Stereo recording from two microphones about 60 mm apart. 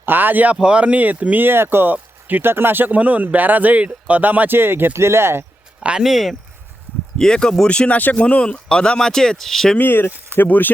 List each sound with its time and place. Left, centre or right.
0.0 s speech: right
0.5 s speech: centre; by 5.5 s right
6.0 s speech: centre
7.2 s speech: centre
9.7 s speech: left